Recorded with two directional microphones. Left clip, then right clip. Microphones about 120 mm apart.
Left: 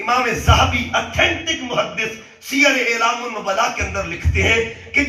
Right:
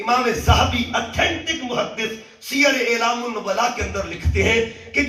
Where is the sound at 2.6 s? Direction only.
35° right (ahead or behind).